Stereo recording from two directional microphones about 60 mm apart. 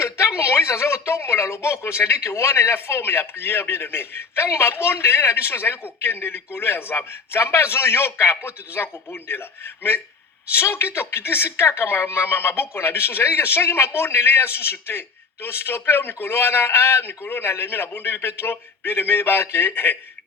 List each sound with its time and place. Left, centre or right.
0.0 s a man's voice: left